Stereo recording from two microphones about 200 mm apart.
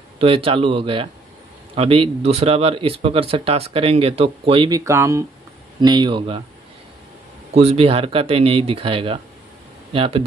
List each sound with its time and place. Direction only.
0.2 s speech: 25° right (ahead or behind)
7.5 s speech: 30° right (ahead or behind)